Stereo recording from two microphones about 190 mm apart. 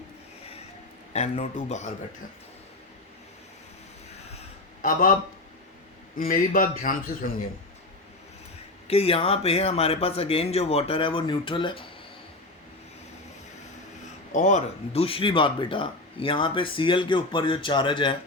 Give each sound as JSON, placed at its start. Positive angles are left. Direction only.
{"t": 1.1, "sound": "speech", "side_deg": 35}
{"t": 4.4, "sound": "a sound", "side_deg": 45}
{"t": 6.1, "sound": "a man's voice", "side_deg": 50}
{"t": 8.9, "sound": "speech", "side_deg": 30}
{"t": 14.3, "sound": "speech", "side_deg": 40}